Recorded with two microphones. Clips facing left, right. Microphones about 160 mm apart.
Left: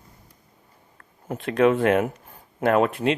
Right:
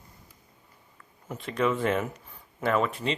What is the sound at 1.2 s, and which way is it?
Speech, 60° left (ahead or behind).